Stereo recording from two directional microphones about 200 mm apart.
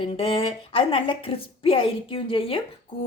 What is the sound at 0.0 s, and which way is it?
A woman's voice, 25° left (ahead or behind).